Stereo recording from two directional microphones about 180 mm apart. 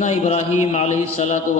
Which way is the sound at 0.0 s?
40° left (ahead or behind).